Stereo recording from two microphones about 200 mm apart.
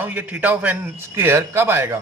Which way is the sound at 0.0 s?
10° right (ahead or behind).